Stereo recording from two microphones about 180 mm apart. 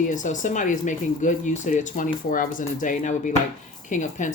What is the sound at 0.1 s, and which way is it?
Speech, 45° left (ahead or behind).